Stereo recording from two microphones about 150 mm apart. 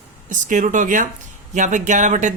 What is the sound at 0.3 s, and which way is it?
Speech, 60° right (ahead or behind).